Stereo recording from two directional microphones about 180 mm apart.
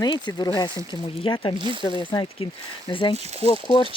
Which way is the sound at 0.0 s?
25° left (ahead or behind).